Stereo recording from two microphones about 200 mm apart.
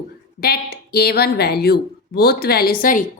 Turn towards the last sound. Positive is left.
turn(degrees=45)  # may be behind; listen again after turning